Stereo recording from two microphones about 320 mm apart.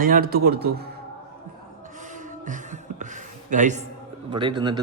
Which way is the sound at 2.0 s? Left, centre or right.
Right.